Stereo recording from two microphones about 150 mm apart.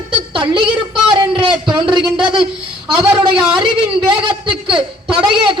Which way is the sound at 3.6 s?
35° right (ahead or behind).